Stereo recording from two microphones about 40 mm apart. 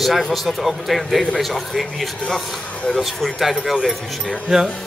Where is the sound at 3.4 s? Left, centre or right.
Centre.